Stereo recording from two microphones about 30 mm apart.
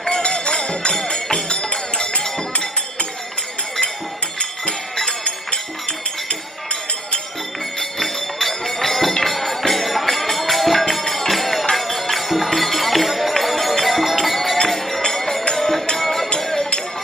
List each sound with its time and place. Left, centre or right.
0.2 s music: left
7.8 s bell: centre
9.2 s music: centre
15.0 s music: centre